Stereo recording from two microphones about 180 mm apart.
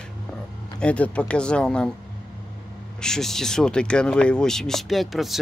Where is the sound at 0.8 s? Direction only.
5° left (ahead or behind).